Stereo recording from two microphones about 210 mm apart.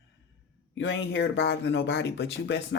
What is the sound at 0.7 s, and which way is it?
Speech, 60° left (ahead or behind).